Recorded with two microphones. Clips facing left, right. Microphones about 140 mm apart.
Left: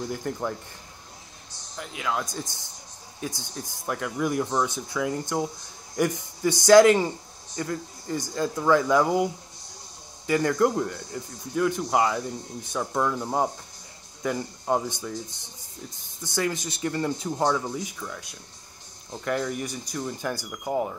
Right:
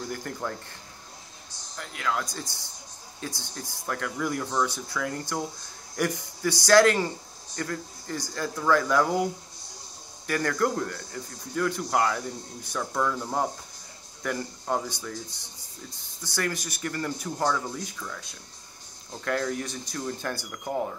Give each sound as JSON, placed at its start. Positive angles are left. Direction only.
{"t": 0.0, "sound": "speech", "side_deg": 15}
{"t": 1.8, "sound": "speech", "side_deg": 15}
{"t": 19.2, "sound": "speech", "side_deg": 10}